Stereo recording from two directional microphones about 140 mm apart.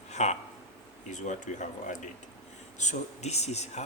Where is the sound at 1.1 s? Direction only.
60° left (ahead or behind).